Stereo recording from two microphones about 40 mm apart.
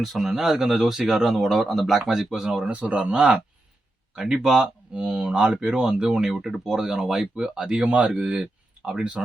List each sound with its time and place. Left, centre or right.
0.0 s speech: centre
2.0 s speech: centre
2.7 s speech: right
3.0 s speech: centre
4.9 s speech: right
8.1 s speech: centre